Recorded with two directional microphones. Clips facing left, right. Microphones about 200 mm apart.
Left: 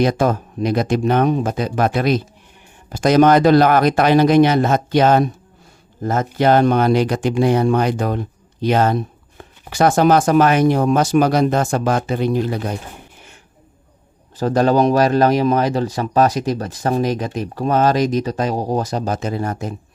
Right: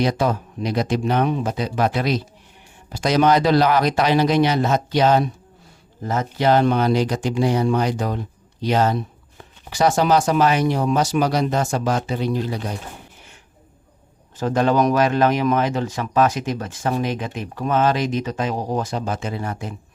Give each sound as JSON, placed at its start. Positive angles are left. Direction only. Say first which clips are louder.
{"t": 0.0, "sound": "speech", "louder": "left 4 dB", "side_deg": 50}
{"t": 14.3, "sound": "speech", "louder": "left 3 dB", "side_deg": 35}